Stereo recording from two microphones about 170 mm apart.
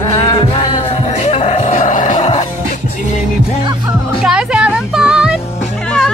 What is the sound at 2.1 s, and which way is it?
Music, 30° left (ahead or behind).